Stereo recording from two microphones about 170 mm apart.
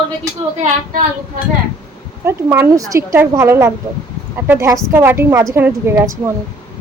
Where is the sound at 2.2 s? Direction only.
15° right (ahead or behind).